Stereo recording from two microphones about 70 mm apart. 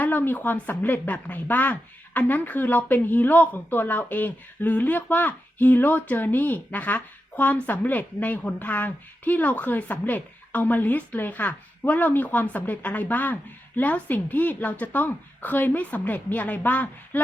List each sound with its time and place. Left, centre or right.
0.0 s a woman's voice: left